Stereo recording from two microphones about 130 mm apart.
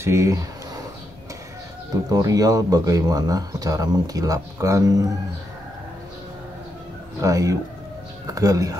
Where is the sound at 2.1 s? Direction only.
25° right (ahead or behind).